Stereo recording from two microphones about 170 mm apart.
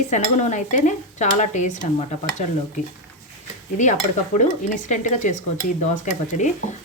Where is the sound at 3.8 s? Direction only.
45° left (ahead or behind).